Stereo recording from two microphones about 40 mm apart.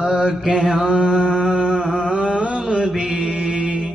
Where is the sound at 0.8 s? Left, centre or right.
Right.